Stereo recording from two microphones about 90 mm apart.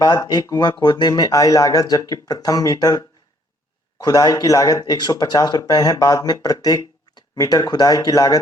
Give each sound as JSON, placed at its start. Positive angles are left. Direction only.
{"t": 0.4, "sound": "speech", "side_deg": 50}